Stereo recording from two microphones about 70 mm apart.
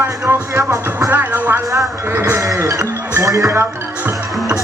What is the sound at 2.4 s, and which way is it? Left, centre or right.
Music, right.